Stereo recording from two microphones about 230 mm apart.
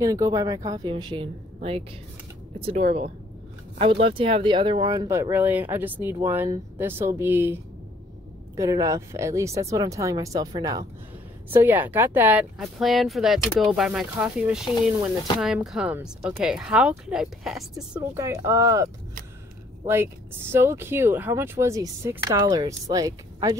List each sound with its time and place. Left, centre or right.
0.0 s speech: centre
18.1 s speech: centre
19.9 s speech: centre